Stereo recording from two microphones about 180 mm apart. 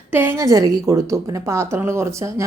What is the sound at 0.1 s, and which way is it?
Speech, 10° right (ahead or behind).